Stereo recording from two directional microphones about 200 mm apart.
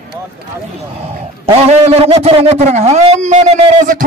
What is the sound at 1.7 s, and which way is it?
A man's voice, 30° right (ahead or behind).